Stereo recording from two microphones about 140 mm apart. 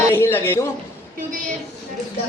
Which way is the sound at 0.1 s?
15° left (ahead or behind).